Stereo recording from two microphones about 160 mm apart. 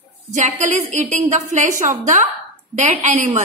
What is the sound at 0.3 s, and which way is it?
A woman's voice, 50° right (ahead or behind).